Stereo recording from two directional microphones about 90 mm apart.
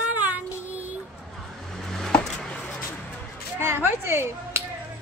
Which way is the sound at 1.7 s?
5° left (ahead or behind).